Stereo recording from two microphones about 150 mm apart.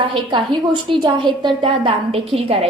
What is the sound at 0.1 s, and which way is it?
A woman's voice, 35° right (ahead or behind).